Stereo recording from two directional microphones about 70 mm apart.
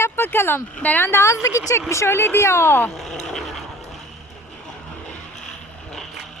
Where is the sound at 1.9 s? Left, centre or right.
Left.